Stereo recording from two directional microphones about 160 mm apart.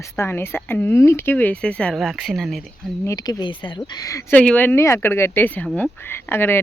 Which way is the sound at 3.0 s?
20° left (ahead or behind).